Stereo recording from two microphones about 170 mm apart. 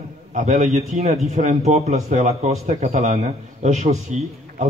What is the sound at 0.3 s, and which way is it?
A man's voice, 45° right (ahead or behind).